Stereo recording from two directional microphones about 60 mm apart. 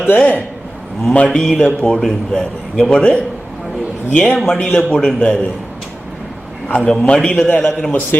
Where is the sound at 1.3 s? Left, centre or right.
Centre.